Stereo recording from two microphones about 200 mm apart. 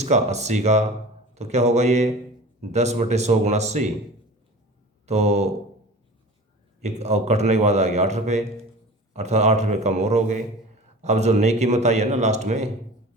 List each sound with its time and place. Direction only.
0.0 s a man's voice: 35° right (ahead or behind)
5.0 s a man's voice: 35° right (ahead or behind)
7.0 s a man's voice: 35° right (ahead or behind)